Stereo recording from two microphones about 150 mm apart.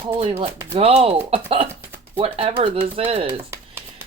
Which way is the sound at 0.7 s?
40° right (ahead or behind).